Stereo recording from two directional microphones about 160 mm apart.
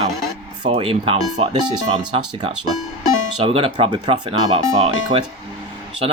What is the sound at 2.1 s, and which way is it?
Speech, 30° right (ahead or behind).